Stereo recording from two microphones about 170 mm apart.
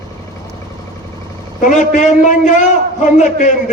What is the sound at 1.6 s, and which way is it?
Speech, 50° left (ahead or behind).